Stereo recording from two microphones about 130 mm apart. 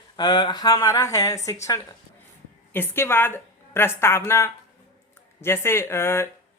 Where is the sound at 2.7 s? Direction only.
15° left (ahead or behind).